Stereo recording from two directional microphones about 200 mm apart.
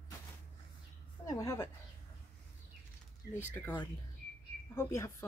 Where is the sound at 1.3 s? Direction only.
15° left (ahead or behind).